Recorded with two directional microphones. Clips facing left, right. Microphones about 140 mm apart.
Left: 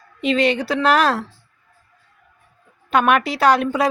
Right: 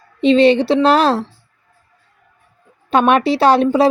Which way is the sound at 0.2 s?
30° right (ahead or behind).